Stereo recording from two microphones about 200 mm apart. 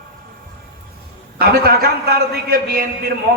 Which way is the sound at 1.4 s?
50° right (ahead or behind).